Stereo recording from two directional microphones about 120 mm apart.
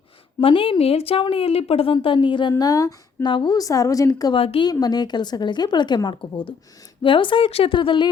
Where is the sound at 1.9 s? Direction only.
45° left (ahead or behind).